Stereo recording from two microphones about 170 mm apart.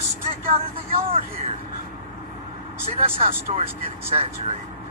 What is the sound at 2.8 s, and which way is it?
Speech, 35° right (ahead or behind).